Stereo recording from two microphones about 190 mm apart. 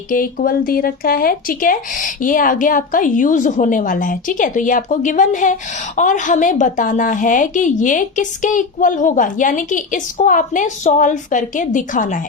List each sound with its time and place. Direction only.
0.1 s a woman's voice: 45° left (ahead or behind)